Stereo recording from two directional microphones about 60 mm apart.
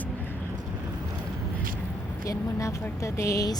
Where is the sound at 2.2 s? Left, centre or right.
Left.